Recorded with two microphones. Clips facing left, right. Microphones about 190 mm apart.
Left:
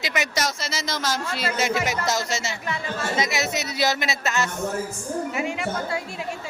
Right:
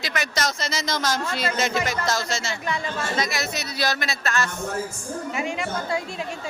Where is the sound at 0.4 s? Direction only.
5° left (ahead or behind); by 4.5 s 20° left (ahead or behind).